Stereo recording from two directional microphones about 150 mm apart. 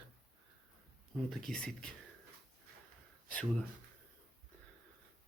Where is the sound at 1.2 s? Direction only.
5° left (ahead or behind).